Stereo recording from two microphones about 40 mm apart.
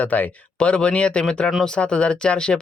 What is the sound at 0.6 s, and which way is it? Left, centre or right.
Speech, left.